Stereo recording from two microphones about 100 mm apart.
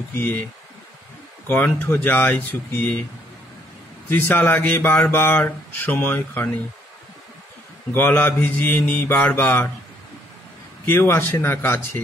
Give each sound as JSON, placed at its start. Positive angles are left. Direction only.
{"t": 0.1, "sound": "speech", "side_deg": 20}
{"t": 1.5, "sound": "speech", "side_deg": 20}
{"t": 4.1, "sound": "speech", "side_deg": 20}
{"t": 7.9, "sound": "speech", "side_deg": 20}
{"t": 10.9, "sound": "speech", "side_deg": 25}